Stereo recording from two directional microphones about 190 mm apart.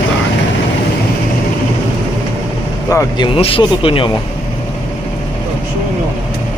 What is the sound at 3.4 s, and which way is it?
Speech, 30° left (ahead or behind).